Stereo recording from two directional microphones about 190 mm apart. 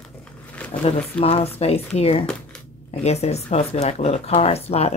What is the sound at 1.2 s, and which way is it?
Speech, 30° left (ahead or behind).